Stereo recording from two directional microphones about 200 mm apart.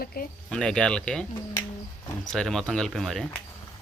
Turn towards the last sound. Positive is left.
turn(degrees=0)  # may be behind; listen again after turning